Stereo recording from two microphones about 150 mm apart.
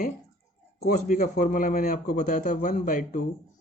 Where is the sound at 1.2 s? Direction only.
60° left (ahead or behind).